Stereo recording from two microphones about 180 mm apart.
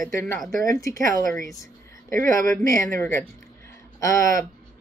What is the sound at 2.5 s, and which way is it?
Speech, 15° left (ahead or behind).